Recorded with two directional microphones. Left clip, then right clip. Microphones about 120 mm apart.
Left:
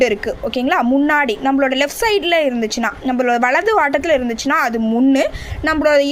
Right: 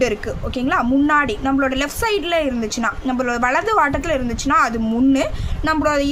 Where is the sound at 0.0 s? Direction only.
35° left (ahead or behind).